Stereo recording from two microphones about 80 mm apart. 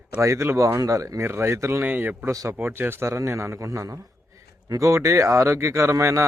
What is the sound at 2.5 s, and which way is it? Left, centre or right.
Speech, right.